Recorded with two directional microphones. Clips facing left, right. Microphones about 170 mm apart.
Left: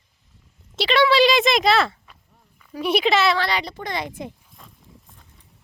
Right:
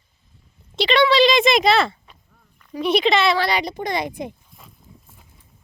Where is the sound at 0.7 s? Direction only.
5° left (ahead or behind).